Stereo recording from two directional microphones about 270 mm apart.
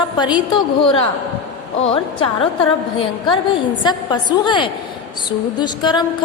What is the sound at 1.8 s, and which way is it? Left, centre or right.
Speech, left.